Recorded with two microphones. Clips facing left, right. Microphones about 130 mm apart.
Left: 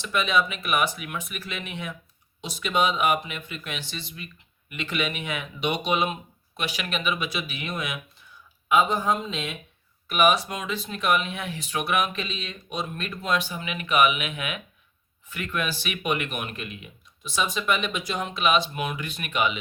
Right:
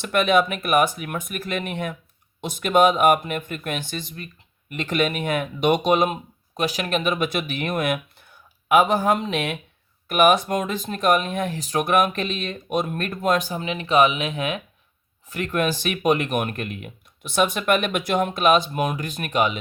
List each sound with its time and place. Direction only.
0.0 s speech: 55° right (ahead or behind)
8.7 s speech: 70° right (ahead or behind)
10.1 s speech: 50° right (ahead or behind)